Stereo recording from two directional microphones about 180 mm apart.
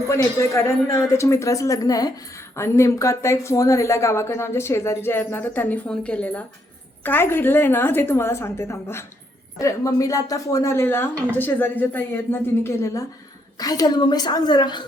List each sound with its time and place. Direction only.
0.1 s a woman's voice: 15° left (ahead or behind)